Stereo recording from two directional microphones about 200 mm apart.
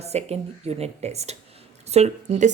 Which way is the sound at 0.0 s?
30° right (ahead or behind).